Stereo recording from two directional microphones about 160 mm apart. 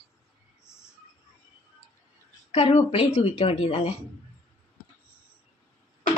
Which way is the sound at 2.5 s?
40° left (ahead or behind).